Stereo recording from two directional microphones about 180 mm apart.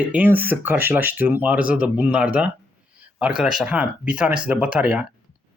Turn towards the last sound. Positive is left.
turn(degrees=-5)  # may be behind; listen again after turning